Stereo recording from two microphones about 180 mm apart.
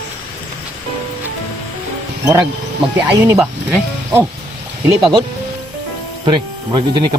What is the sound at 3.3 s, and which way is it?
Speech, 10° right (ahead or behind).